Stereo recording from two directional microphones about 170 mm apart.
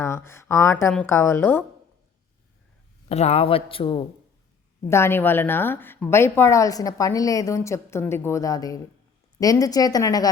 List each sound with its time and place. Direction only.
0.0 s a woman's voice: 15° left (ahead or behind)
3.1 s speech: 35° left (ahead or behind)
4.9 s a woman's voice: 15° left (ahead or behind)